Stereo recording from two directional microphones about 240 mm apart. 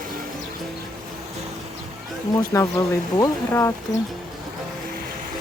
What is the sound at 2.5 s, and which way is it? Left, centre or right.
A woman's voice, centre.